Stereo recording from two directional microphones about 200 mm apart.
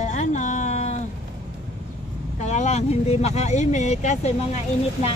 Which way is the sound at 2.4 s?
35° left (ahead or behind).